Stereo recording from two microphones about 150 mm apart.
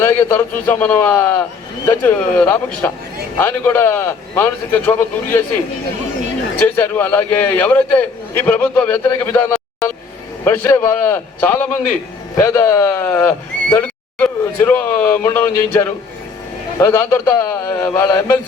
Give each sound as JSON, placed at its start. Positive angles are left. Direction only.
{"t": 0.0, "sound": "speech", "side_deg": 15}
{"t": 6.6, "sound": "speech", "side_deg": 15}